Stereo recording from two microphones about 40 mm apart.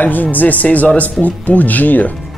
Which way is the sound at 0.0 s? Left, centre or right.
Left.